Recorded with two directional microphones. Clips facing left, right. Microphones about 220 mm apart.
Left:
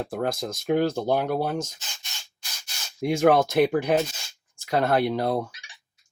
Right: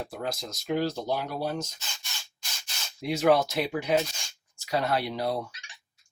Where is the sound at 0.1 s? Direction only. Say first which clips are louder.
Left 7 dB; 50° left (ahead or behind).